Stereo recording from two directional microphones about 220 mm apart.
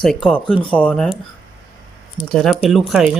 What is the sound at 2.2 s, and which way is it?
Speech, centre (ahead or behind).